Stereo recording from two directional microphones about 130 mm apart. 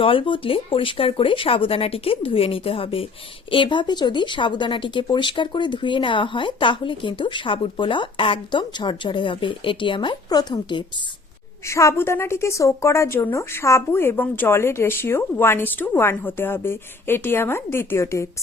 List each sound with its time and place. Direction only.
0.0 s speech: 40° left (ahead or behind)
11.6 s a woman's voice: 20° left (ahead or behind)